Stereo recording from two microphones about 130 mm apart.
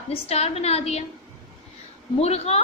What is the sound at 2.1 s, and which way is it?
Speech, 50° left (ahead or behind).